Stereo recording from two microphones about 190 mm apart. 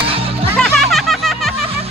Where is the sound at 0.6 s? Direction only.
5° left (ahead or behind).